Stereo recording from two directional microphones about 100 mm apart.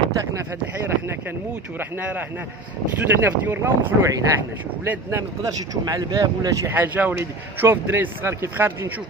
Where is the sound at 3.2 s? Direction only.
20° right (ahead or behind).